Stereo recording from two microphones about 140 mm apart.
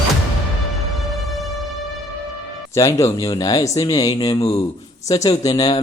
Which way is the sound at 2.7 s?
20° left (ahead or behind).